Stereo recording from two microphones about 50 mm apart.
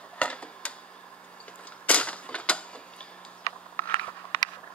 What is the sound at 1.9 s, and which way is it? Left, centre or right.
Cap gun, left.